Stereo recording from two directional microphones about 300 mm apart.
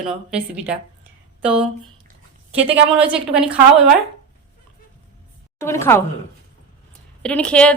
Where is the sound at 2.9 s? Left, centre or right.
Centre.